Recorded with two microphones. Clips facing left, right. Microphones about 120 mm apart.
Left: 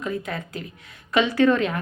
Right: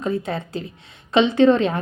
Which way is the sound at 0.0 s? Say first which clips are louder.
Right 5 dB; 30° right (ahead or behind).